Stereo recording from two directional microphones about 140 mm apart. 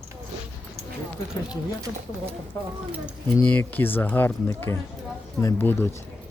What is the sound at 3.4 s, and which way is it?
Speech, 15° left (ahead or behind).